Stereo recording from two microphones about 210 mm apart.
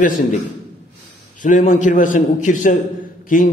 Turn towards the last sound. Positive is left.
turn(degrees=40)  # may be behind; listen again after turning